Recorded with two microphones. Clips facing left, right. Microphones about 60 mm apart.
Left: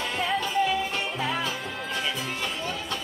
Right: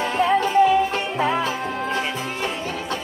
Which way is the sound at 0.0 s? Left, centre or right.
Right.